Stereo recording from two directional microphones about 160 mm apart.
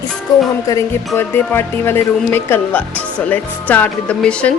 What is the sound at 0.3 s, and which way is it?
Speech, 25° left (ahead or behind).